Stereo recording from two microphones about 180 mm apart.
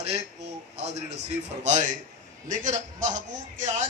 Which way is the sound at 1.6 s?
40° right (ahead or behind).